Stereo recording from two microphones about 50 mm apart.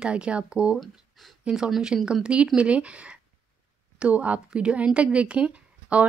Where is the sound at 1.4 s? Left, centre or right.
Centre.